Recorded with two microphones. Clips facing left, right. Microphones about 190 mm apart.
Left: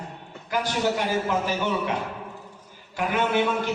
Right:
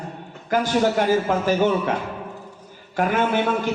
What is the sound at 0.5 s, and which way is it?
A man's voice, 50° right (ahead or behind).